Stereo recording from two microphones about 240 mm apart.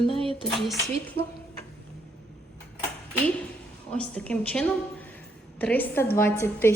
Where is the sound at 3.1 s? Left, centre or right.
Centre.